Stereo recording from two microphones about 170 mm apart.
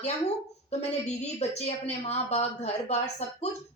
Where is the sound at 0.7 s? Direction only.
40° left (ahead or behind).